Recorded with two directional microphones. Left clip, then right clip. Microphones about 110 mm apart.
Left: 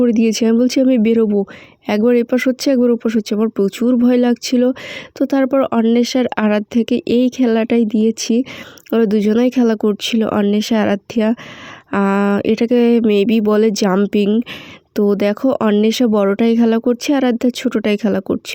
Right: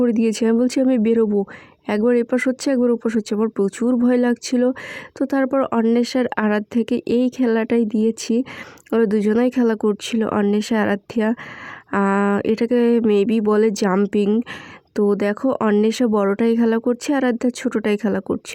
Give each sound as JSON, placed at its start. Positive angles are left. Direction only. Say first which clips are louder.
{"t": 0.0, "sound": "speech", "louder": "left 4 dB", "side_deg": 15}
{"t": 13.9, "sound": "speech", "louder": "left 3 dB", "side_deg": 10}